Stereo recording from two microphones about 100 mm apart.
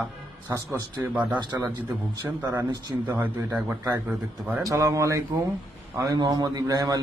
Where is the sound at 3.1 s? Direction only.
20° right (ahead or behind).